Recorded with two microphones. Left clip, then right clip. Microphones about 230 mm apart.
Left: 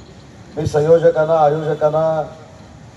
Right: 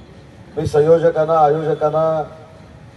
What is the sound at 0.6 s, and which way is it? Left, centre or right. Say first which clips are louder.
A man's voice: even; right.